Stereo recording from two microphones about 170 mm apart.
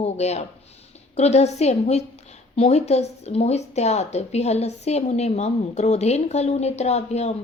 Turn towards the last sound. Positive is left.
turn(degrees=40)  # may be behind; listen again after turning